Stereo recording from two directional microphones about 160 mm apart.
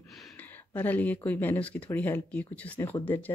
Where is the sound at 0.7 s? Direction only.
10° left (ahead or behind).